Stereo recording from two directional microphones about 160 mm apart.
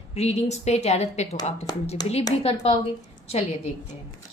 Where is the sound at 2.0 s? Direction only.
25° left (ahead or behind).